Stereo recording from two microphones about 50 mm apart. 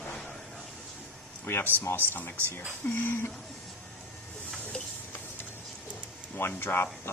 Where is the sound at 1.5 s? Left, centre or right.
Left.